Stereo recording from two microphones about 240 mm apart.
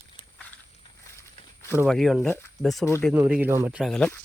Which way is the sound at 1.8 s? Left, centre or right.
Centre.